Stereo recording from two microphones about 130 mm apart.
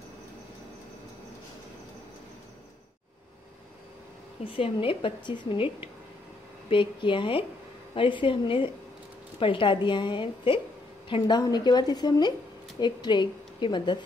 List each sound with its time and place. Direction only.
4.6 s speech: 45° left (ahead or behind)
6.7 s speech: 40° left (ahead or behind)